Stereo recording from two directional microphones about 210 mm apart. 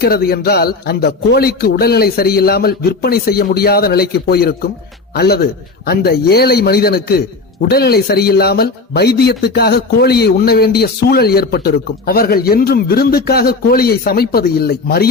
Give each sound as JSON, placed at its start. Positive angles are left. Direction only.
{"t": 0.0, "sound": "a man's voice", "side_deg": 45}